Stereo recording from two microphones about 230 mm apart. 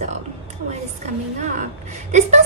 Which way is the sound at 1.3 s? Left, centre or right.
Right.